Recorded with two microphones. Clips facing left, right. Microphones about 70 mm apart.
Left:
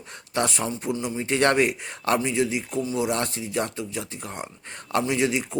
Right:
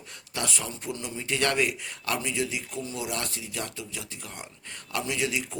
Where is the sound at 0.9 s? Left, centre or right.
Left.